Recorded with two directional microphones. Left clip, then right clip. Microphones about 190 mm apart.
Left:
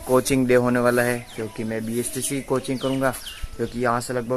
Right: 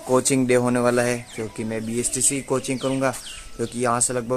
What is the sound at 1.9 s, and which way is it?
Speech, centre (ahead or behind).